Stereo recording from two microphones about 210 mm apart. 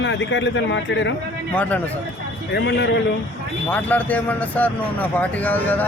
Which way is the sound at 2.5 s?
55° left (ahead or behind).